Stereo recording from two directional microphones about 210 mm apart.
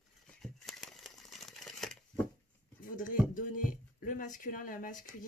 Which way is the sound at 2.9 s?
40° left (ahead or behind).